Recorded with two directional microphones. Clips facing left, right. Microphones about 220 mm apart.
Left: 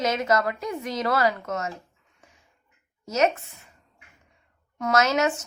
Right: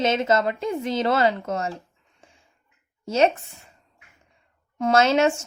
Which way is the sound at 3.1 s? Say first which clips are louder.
Right 3 dB; 30° right (ahead or behind).